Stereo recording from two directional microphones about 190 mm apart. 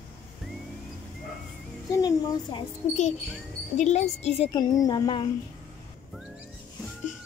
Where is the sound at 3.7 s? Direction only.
35° left (ahead or behind).